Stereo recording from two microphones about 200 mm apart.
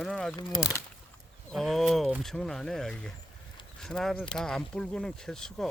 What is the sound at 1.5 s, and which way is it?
Speech, centre (ahead or behind).